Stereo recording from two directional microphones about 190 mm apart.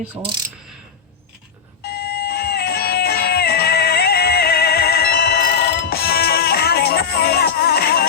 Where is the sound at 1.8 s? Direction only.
55° left (ahead or behind).